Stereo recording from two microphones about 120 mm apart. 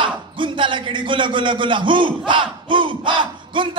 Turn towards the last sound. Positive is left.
turn(degrees=-45)  # may be behind; listen again after turning